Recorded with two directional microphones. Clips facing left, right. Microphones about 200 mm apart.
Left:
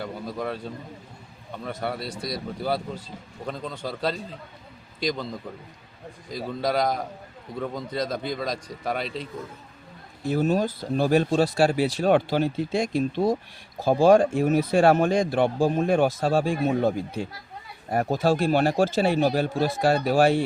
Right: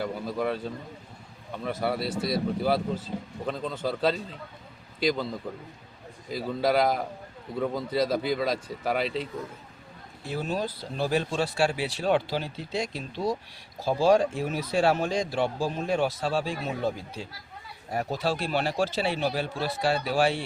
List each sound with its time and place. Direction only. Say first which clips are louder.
0.0 s speech: right 2 dB; centre (ahead or behind)
10.2 s speech: left 7 dB; 45° left (ahead or behind)